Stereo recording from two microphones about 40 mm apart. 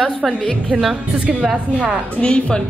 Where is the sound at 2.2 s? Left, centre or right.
Left.